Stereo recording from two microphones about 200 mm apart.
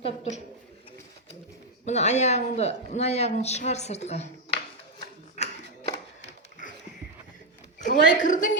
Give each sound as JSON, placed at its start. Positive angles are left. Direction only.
{"t": 0.0, "sound": "speech", "side_deg": 30}
{"t": 1.8, "sound": "speech", "side_deg": 35}
{"t": 6.2, "sound": "a sound", "side_deg": 40}
{"t": 7.8, "sound": "a woman's voice", "side_deg": 40}